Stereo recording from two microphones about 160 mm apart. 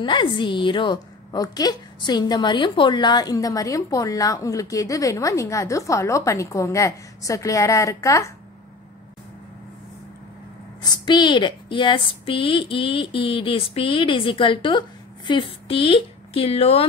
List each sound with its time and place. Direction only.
0.0 s a woman's voice: 30° left (ahead or behind)
10.8 s a woman's voice: 30° left (ahead or behind)